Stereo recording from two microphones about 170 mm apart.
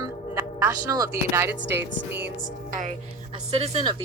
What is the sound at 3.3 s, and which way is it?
Speech, 35° right (ahead or behind).